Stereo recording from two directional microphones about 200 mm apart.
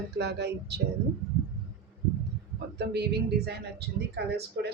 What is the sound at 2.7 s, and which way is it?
A woman's voice, 55° right (ahead or behind).